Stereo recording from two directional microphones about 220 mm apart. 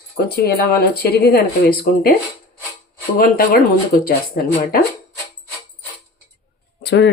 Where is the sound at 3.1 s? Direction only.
40° left (ahead or behind).